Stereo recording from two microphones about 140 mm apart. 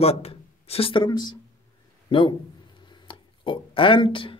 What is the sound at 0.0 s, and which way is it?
A man's voice, 45° left (ahead or behind).